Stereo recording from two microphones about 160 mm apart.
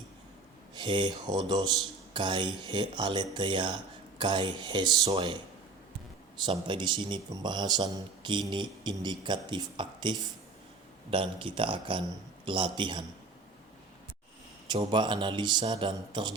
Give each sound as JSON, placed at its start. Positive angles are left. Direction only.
{"t": 0.7, "sound": "a man's voice", "side_deg": -30}
{"t": 14.7, "sound": "a man's voice", "side_deg": -30}